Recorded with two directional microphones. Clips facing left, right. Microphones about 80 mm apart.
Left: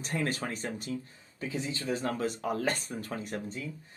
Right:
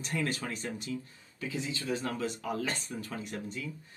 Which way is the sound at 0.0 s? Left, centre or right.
Left.